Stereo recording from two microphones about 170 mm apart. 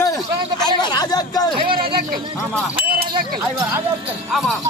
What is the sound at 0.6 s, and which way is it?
Speech, 25° left (ahead or behind).